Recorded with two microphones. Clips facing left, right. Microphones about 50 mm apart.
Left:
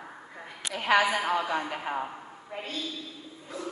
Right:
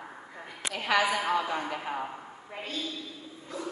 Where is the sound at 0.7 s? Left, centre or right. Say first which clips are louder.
Left 3 dB; left.